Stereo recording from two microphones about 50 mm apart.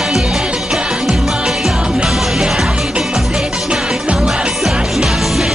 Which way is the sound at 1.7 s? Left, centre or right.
Centre.